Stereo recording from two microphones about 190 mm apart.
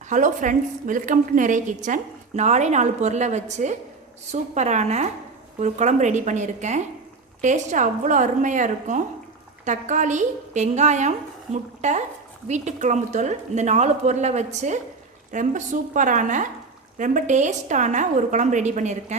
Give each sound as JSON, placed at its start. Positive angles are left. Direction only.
{"t": 0.1, "sound": "a woman's voice", "side_deg": -40}